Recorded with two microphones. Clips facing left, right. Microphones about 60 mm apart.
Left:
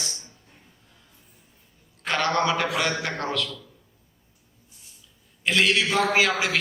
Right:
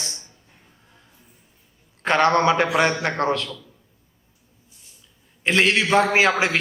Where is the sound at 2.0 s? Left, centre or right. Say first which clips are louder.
Right 6 dB; right.